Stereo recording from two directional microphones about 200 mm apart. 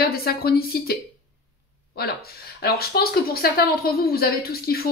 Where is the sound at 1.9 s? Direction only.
50° left (ahead or behind).